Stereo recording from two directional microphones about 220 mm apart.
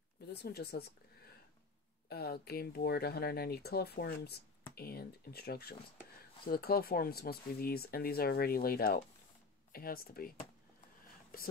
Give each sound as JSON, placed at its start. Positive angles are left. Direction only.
{"t": 0.3, "sound": "speech", "side_deg": 45}
{"t": 2.0, "sound": "speech", "side_deg": 45}
{"t": 11.3, "sound": "speech", "side_deg": 40}